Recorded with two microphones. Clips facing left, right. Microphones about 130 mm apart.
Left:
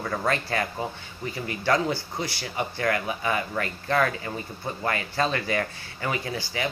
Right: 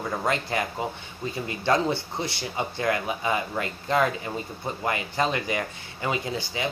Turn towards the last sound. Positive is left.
turn(degrees=-20)  # may be behind; listen again after turning